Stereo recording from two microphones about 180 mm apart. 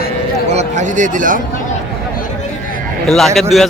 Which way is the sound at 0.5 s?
40° right (ahead or behind).